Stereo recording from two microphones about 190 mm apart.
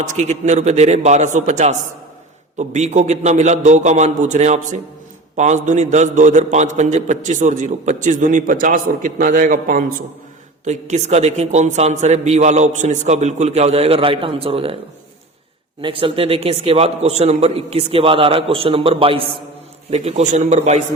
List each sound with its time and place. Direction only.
0.0 s a man's voice: 40° right (ahead or behind)
15.8 s a man's voice: 25° right (ahead or behind)